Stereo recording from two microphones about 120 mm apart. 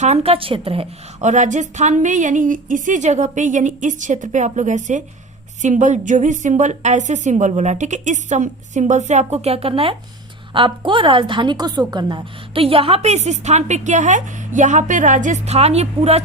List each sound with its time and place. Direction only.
0.0 s speech: 65° right (ahead or behind)
1.2 s a woman's voice: 90° right; by 16.2 s 60° right (ahead or behind)